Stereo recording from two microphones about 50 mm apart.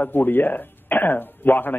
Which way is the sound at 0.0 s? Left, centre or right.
Left.